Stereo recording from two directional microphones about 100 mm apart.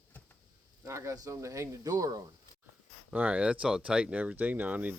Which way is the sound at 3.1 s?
15° right (ahead or behind).